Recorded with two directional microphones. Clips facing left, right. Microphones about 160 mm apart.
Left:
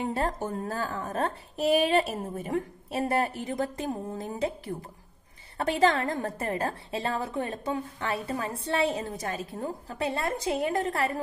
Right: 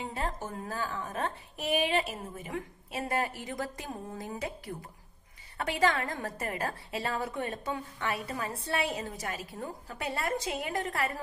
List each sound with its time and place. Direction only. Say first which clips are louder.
0.1 s a woman's voice: left 6 dB; 40° left (ahead or behind)